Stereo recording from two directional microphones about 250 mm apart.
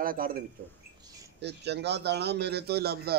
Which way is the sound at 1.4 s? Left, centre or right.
Right.